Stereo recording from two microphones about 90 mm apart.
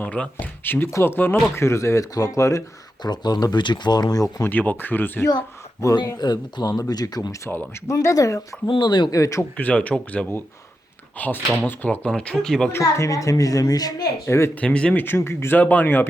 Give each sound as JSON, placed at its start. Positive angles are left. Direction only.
{"t": 0.0, "sound": "speech", "side_deg": 20}
{"t": 3.0, "sound": "speech", "side_deg": 50}
{"t": 4.4, "sound": "speech", "side_deg": 20}
{"t": 6.1, "sound": "speech", "side_deg": 50}
{"t": 8.6, "sound": "speech", "side_deg": 55}
{"t": 9.1, "sound": "speech", "side_deg": 35}
{"t": 9.4, "sound": "speech", "side_deg": 20}
{"t": 12.7, "sound": "speech", "side_deg": 35}
{"t": 14.3, "sound": "speech", "side_deg": 30}
{"t": 14.6, "sound": "speech", "side_deg": 10}
{"t": 15.0, "sound": "speech", "side_deg": 25}